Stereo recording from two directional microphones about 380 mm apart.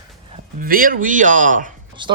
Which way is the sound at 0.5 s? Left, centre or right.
Right.